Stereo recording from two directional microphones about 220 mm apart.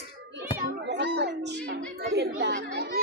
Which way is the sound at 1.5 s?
50° right (ahead or behind).